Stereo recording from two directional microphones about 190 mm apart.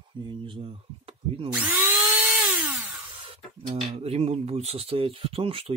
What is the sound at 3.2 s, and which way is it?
Speech, 30° right (ahead or behind).